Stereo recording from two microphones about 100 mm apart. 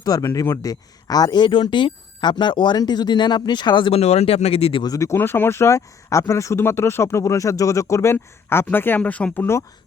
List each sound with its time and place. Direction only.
0.0 s speech: 40° left (ahead or behind)
3.9 s speech: 90° left
4.8 s speech: 35° left (ahead or behind)